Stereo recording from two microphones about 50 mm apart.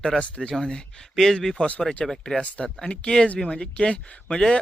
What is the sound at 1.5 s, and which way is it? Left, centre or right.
Speech, left.